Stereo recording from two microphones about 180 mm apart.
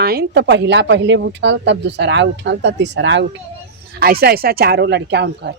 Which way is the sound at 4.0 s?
60° right (ahead or behind).